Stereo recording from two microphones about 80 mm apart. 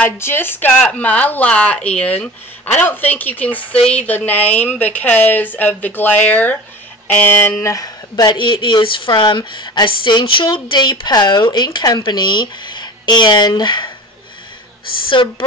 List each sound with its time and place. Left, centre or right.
0.2 s speech: left
7.6 s speech: left
8.4 s a woman's voice: left
15.0 s speech: left